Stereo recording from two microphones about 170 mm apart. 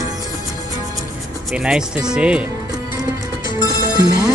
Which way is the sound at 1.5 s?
5° right (ahead or behind).